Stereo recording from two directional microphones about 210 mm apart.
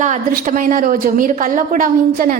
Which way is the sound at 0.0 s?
35° right (ahead or behind).